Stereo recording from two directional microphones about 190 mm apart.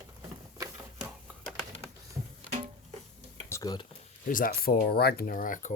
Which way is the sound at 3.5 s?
20° left (ahead or behind).